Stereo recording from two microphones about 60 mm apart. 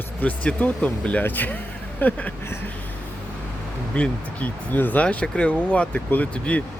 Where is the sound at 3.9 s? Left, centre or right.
Left.